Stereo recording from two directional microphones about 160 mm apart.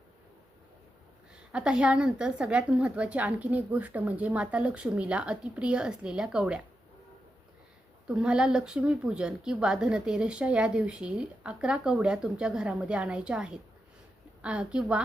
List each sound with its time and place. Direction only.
1.5 s a woman's voice: 5° right (ahead or behind)
8.0 s speech: 5° right (ahead or behind)